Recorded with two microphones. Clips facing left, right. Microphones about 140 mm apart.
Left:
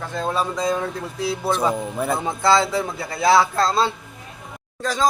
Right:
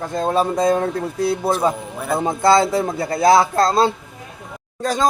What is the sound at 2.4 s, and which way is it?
Speech, 45° right (ahead or behind).